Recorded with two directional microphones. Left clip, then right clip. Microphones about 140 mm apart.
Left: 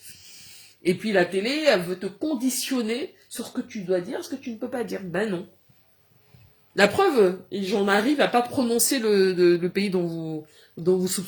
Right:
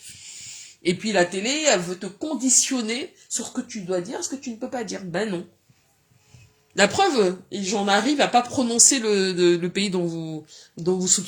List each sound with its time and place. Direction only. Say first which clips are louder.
0.9 s speech: right 1 dB; 40° right (ahead or behind)
6.7 s speech: even; 35° right (ahead or behind)